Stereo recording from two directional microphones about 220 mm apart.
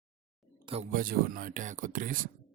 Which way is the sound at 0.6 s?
30° right (ahead or behind).